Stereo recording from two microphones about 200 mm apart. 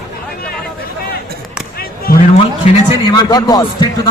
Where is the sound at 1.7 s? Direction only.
50° left (ahead or behind).